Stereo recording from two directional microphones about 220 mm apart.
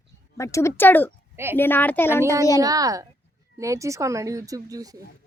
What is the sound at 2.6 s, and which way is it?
Speech, 15° right (ahead or behind).